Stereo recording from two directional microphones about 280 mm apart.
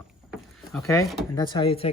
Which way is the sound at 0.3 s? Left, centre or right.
Centre.